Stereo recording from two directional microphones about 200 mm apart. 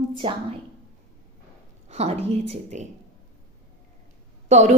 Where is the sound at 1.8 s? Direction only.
30° right (ahead or behind).